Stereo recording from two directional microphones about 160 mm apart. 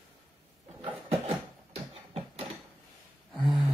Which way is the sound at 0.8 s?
40° right (ahead or behind).